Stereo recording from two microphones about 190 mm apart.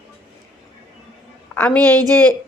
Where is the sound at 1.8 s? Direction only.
20° right (ahead or behind).